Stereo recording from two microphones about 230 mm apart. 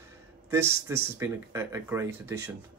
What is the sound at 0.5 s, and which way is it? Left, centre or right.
Speech, centre.